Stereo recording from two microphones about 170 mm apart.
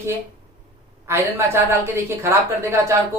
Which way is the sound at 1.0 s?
15° right (ahead or behind).